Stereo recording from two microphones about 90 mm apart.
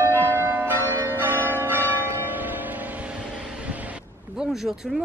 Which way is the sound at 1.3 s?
25° left (ahead or behind).